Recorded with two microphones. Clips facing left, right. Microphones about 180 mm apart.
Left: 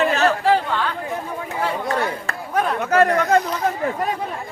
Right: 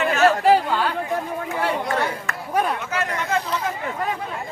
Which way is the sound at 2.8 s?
40° left (ahead or behind).